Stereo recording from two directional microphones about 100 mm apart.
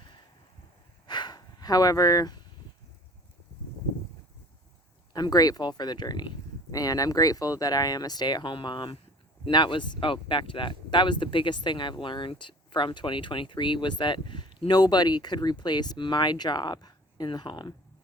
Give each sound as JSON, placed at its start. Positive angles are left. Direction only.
{"t": 1.0, "sound": "snort", "side_deg": 45}
{"t": 5.1, "sound": "speech", "side_deg": 40}